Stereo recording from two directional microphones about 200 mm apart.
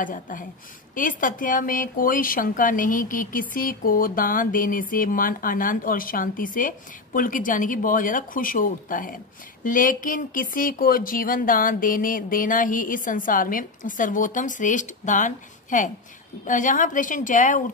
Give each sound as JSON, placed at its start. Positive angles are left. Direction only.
{"t": 0.0, "sound": "a woman's voice", "side_deg": 40}